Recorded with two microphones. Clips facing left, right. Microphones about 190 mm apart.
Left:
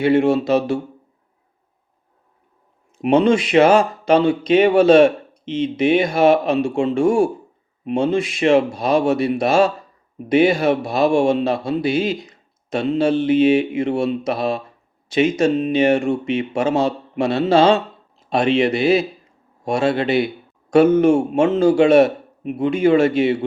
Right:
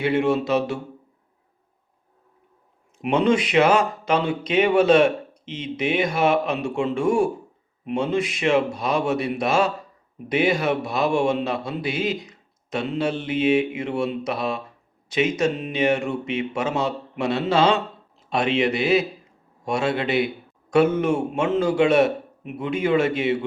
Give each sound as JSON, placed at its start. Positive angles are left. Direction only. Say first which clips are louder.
{"t": 0.0, "sound": "speech", "louder": "left 5 dB", "side_deg": 35}
{"t": 3.0, "sound": "a man's voice", "louder": "left 5 dB", "side_deg": 30}